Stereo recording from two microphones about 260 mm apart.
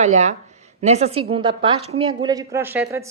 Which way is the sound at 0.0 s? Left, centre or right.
Right.